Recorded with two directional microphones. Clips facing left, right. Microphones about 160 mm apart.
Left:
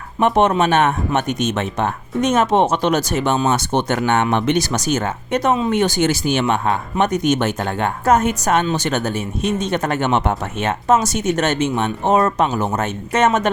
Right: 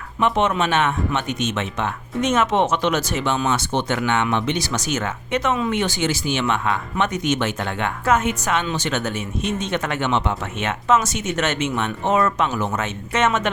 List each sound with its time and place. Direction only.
0.2 s speech: 45° left (ahead or behind)
10.6 s speech: 40° left (ahead or behind)